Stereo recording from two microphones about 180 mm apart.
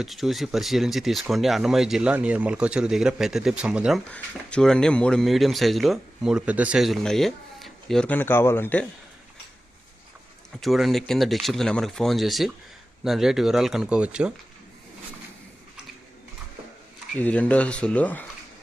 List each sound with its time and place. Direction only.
0.0 s speech: centre (ahead or behind)
4.1 s speech: 5° left (ahead or behind)
10.6 s speech: centre (ahead or behind)
17.2 s speech: 10° left (ahead or behind)